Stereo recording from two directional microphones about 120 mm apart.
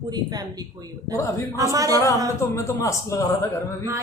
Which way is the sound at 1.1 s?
30° right (ahead or behind).